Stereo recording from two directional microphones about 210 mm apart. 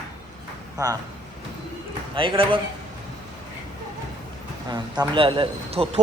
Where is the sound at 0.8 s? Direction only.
15° right (ahead or behind).